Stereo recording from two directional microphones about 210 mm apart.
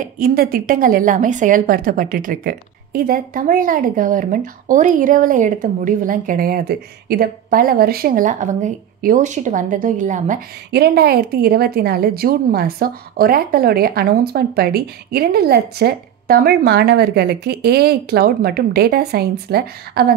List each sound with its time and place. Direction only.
0.0 s a woman's voice: 45° right (ahead or behind)
10.7 s a woman's voice: 50° right (ahead or behind)